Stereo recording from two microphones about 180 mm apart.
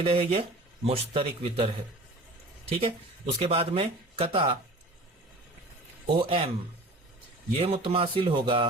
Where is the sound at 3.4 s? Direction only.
30° right (ahead or behind).